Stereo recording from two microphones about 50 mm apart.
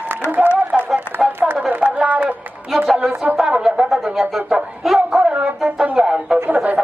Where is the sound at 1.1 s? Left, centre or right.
Right.